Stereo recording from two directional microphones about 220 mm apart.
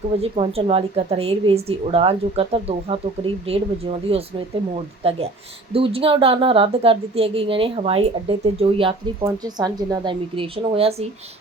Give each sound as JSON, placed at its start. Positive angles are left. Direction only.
{"t": 0.2, "sound": "a woman's voice", "side_deg": -25}